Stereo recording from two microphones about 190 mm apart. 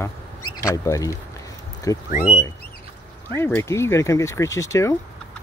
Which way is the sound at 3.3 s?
15° left (ahead or behind).